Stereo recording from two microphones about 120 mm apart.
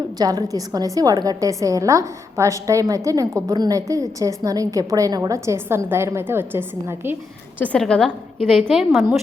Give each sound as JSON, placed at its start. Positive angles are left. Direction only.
{"t": 0.2, "sound": "a woman's voice", "side_deg": -30}
{"t": 7.6, "sound": "a woman's voice", "side_deg": 10}